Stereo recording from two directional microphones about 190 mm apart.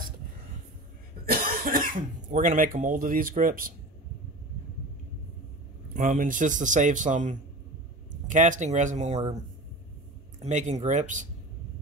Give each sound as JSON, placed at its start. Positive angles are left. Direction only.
{"t": 1.2, "sound": "speech", "side_deg": -50}
{"t": 5.9, "sound": "a man's voice", "side_deg": -45}
{"t": 10.4, "sound": "a man's voice", "side_deg": -40}